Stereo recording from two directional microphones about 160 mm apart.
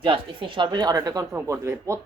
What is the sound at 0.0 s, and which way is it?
Speech, 35° right (ahead or behind).